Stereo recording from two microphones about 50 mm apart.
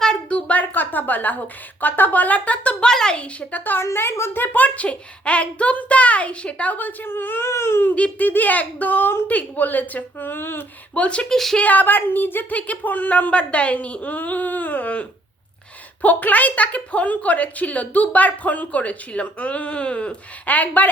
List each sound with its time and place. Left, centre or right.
0.0 s a sound: centre; by 1.4 s left
1.8 s a woman's voice: left
2.8 s speech: centre
3.5 s a woman's voice: left
4.6 s a child's voice: left
7.4 s speech: left
7.9 s a child's voice: left
10.9 s a child's voice: left
11.3 s speech: centre
11.6 s a woman's voice: left
12.5 s a woman's voice: left